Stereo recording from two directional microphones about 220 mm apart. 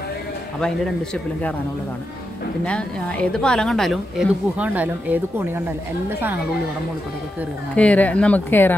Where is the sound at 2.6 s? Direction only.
5° left (ahead or behind).